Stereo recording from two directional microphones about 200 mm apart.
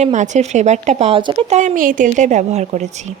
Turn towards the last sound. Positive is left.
turn(degrees=-35)  # may be behind; listen again after turning